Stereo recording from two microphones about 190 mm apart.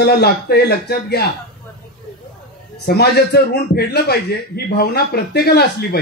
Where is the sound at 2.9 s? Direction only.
55° left (ahead or behind).